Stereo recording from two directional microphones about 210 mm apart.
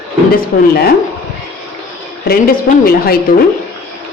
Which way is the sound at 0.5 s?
40° left (ahead or behind).